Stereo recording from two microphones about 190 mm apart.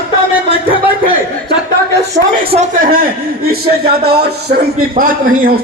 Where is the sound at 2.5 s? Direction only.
50° right (ahead or behind).